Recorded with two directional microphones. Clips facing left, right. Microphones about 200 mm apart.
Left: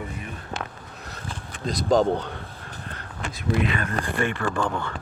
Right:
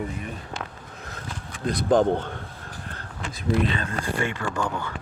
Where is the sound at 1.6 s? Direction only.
55° right (ahead or behind).